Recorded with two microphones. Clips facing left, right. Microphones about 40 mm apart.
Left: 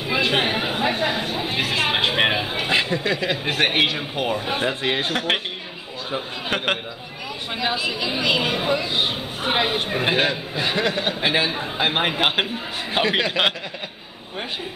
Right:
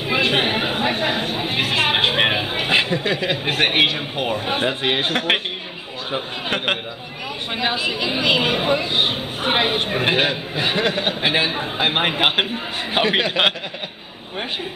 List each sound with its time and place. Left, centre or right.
0.0 s chatter: centre
4.8 s speech: right
6.5 s speech: centre